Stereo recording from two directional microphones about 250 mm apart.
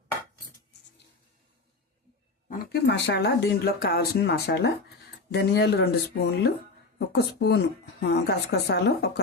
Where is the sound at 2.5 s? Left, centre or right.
Left.